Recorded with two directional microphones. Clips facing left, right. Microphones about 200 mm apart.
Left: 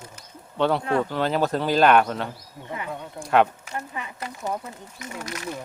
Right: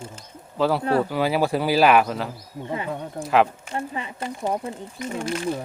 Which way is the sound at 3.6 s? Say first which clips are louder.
Right 4 dB; 30° right (ahead or behind).